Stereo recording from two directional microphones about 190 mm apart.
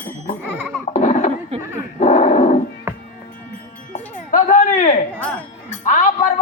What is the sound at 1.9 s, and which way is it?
Dog, 40° left (ahead or behind).